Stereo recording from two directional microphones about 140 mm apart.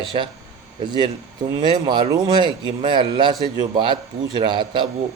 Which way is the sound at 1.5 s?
35° right (ahead or behind).